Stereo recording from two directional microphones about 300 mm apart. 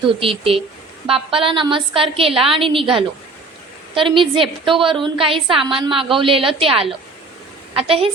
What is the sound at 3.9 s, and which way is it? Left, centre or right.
A woman's voice, centre.